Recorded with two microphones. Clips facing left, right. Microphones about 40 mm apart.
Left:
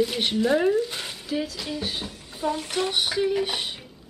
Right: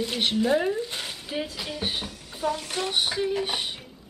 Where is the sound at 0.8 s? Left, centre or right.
Centre.